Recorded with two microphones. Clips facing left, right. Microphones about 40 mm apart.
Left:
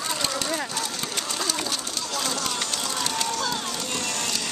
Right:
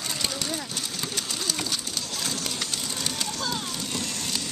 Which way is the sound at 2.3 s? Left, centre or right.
Left.